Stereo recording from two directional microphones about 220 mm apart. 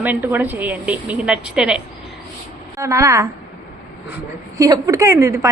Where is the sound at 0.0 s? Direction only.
10° right (ahead or behind).